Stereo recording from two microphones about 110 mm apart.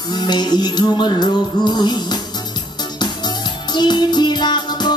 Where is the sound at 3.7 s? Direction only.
40° left (ahead or behind).